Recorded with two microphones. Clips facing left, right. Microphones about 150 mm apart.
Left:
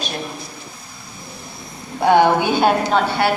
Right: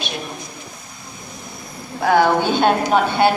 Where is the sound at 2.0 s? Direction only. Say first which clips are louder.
Left 2 dB; 20° left (ahead or behind).